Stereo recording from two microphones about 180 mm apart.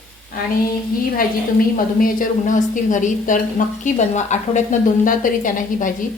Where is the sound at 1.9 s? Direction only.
50° left (ahead or behind).